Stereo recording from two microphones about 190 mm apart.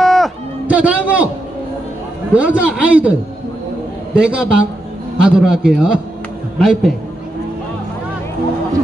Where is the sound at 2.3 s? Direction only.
5° right (ahead or behind).